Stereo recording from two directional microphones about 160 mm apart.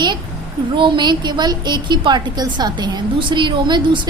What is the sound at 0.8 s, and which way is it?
A woman's voice, 30° right (ahead or behind).